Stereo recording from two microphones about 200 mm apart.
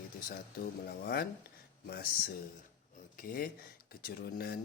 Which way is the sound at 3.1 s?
45° left (ahead or behind).